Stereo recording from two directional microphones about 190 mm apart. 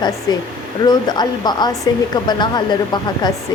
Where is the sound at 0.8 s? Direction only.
20° left (ahead or behind).